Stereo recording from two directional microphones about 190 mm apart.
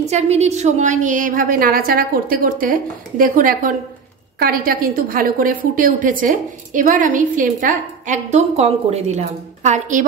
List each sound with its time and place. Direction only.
0.1 s a woman's voice: 35° right (ahead or behind)